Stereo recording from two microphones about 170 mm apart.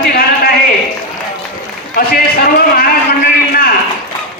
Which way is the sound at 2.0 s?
60° left (ahead or behind).